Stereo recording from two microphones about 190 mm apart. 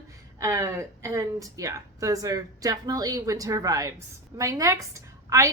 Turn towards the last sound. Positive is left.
turn(degrees=-15)  # may be behind; listen again after turning